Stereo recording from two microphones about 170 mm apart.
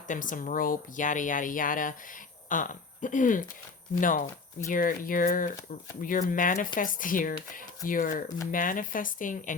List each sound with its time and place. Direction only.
0.1 s speech: 50° left (ahead or behind)